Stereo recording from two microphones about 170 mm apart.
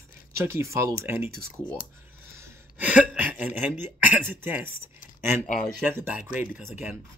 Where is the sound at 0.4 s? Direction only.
15° right (ahead or behind).